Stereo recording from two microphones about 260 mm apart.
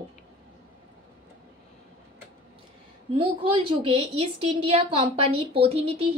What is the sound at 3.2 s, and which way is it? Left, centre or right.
A woman's voice, right.